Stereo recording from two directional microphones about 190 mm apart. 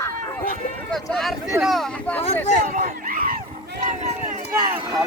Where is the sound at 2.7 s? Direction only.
45° right (ahead or behind).